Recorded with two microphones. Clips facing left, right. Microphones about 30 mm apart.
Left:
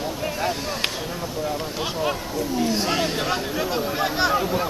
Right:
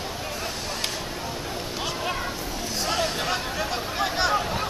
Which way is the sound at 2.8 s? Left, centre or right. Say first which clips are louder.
Left 3 dB; centre.